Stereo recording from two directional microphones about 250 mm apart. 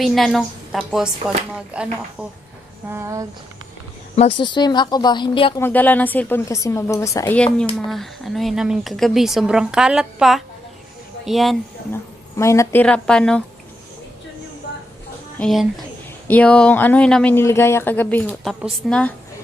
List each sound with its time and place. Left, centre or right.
0.0 s speech: centre
4.4 s speech: centre
5.6 s speech: centre
12.4 s speech: centre
15.4 s speech: centre